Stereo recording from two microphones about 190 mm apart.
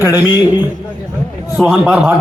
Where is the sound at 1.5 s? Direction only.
5° right (ahead or behind).